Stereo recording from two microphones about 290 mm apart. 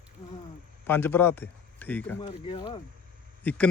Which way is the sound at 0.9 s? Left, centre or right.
Centre.